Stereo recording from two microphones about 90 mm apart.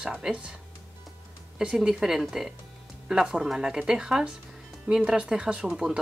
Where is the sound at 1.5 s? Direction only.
10° right (ahead or behind).